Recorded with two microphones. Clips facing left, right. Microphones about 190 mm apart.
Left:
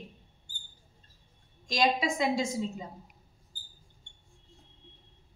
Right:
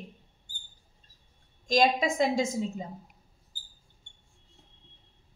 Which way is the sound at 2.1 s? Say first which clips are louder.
Right 2 dB; 45° right (ahead or behind).